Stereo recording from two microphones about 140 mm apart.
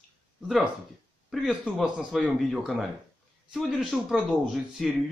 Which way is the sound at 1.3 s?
5° right (ahead or behind).